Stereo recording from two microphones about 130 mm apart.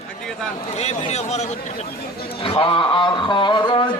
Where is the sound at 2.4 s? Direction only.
40° left (ahead or behind).